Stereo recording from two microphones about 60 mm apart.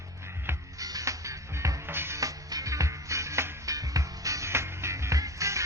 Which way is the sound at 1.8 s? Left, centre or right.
Right.